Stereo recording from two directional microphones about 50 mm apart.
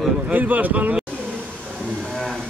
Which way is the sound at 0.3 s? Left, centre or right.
Right.